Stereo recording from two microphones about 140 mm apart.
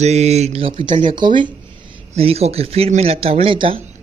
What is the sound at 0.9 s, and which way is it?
Speech, 65° right (ahead or behind).